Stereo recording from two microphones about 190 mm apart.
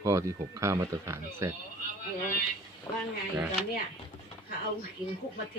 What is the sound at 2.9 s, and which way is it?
Speech, 15° left (ahead or behind).